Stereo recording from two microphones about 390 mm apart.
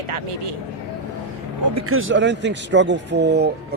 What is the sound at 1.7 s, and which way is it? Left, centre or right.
Speech, right.